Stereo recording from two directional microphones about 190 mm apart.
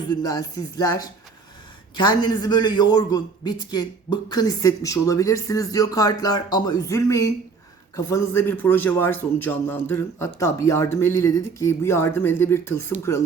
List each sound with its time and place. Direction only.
0.0 s a man's voice: 20° left (ahead or behind)